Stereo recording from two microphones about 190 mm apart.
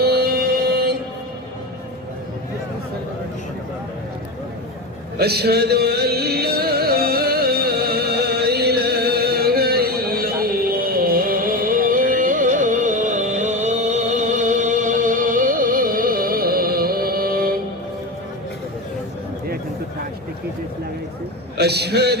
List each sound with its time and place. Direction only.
0.0 s music: 55° right (ahead or behind)
5.1 s music: 55° right (ahead or behind)
21.6 s a sound: 60° right (ahead or behind)